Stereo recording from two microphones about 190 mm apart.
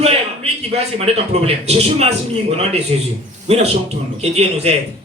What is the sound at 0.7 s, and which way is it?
A man's voice, 35° right (ahead or behind).